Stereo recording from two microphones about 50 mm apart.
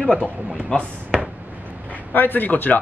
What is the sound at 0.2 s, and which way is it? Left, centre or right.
Speech, right.